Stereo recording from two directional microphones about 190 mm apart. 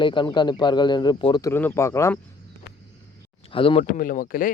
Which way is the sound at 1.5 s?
10° left (ahead or behind).